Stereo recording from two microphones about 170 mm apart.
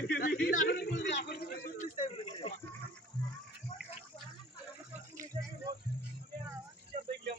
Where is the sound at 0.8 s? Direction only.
90° left; by 1.9 s 60° left (ahead or behind).